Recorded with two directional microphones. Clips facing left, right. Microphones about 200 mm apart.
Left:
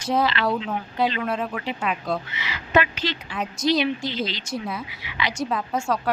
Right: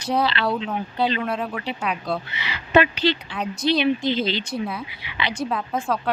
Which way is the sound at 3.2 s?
5° left (ahead or behind).